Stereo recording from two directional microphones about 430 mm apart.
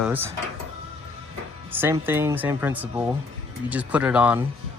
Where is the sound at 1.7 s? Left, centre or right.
Centre.